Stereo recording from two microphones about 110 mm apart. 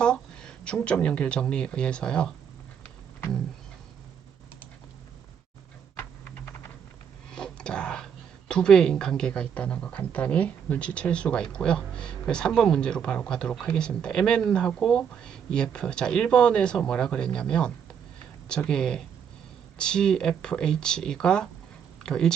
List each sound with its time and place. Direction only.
0.0 s speech: 5° left (ahead or behind)
6.0 s typing: 15° left (ahead or behind)
7.3 s speech: 5° left (ahead or behind)